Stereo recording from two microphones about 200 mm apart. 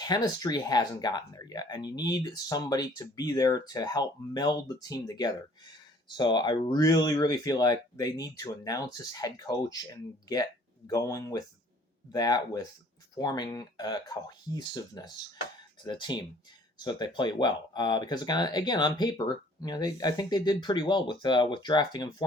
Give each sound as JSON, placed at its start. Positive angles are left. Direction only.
{"t": 0.0, "sound": "speech", "side_deg": 20}